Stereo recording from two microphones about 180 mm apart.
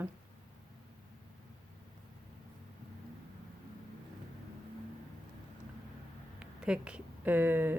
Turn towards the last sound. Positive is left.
turn(degrees=-10)  # may be behind; listen again after turning